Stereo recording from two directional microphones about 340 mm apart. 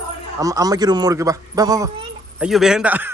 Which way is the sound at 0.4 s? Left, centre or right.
Centre.